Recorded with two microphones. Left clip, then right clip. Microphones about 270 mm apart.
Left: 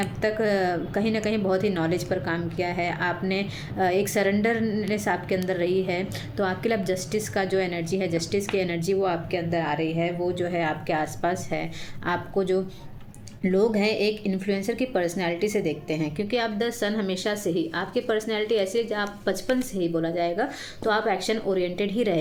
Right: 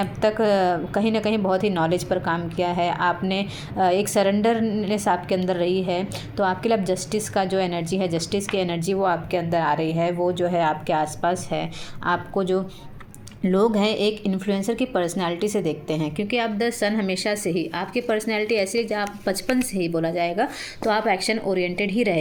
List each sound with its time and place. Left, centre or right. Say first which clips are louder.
0.2 s a woman's voice: right 5 dB; centre